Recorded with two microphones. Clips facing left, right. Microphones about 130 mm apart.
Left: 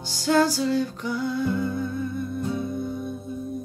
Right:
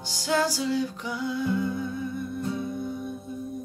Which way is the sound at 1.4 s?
15° right (ahead or behind).